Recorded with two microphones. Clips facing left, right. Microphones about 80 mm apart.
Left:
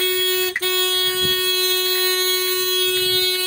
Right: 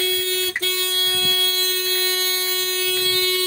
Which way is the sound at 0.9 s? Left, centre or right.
Left.